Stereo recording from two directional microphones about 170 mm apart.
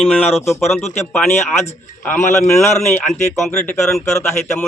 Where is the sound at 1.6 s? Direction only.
10° left (ahead or behind).